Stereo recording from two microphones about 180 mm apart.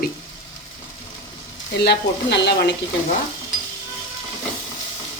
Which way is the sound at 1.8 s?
70° left (ahead or behind).